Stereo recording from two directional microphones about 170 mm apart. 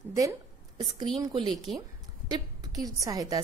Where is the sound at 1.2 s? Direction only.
30° right (ahead or behind).